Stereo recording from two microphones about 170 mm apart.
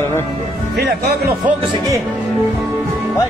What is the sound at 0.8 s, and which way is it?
Speech, 80° right.